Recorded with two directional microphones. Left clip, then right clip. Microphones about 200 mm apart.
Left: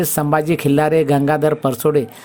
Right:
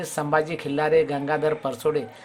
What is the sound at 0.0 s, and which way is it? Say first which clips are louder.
Speech: left 6 dB; 30° left (ahead or behind).